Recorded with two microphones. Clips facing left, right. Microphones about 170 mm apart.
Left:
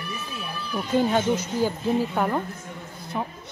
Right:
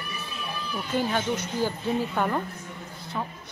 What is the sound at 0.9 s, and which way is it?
A woman's voice, 20° left (ahead or behind).